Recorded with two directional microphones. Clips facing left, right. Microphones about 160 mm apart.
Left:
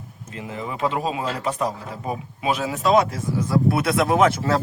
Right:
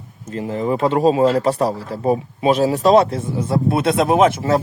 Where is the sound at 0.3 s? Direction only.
35° right (ahead or behind).